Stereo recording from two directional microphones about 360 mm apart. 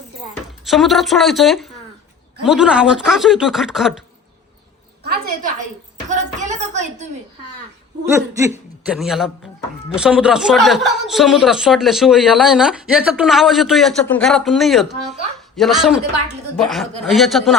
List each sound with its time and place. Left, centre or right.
0.6 s speech: centre
5.0 s a woman's voice: right
8.1 s speech: centre